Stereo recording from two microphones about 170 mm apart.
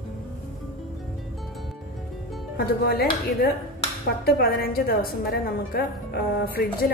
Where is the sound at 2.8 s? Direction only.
65° left (ahead or behind).